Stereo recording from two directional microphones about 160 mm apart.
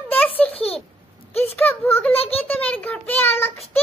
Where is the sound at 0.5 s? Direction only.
40° left (ahead or behind).